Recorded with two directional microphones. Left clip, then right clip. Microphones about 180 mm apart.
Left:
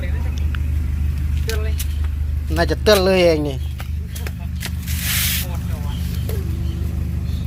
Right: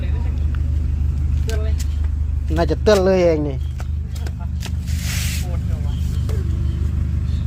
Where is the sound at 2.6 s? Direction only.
15° right (ahead or behind).